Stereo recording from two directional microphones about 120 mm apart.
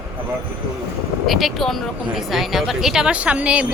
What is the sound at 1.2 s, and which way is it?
Speech, centre (ahead or behind).